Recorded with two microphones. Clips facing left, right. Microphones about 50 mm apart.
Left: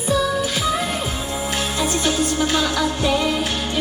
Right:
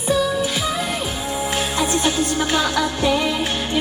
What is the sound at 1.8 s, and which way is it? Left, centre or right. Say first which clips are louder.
Music: even; right.